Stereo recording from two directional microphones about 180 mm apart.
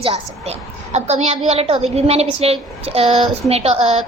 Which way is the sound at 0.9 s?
35° right (ahead or behind).